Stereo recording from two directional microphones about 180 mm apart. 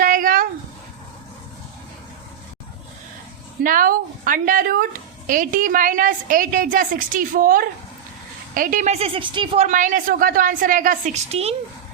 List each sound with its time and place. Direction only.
0.0 s a sound: 50° right (ahead or behind)
3.6 s a woman's voice: 50° right (ahead or behind); by 9.6 s 25° right (ahead or behind)
9.6 s a woman's voice: 45° right (ahead or behind)